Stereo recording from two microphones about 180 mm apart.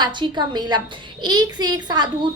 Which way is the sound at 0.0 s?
25° right (ahead or behind).